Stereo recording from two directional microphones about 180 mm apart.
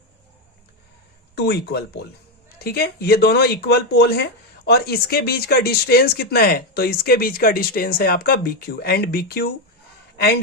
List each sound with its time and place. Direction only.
1.4 s speech: 65° left (ahead or behind)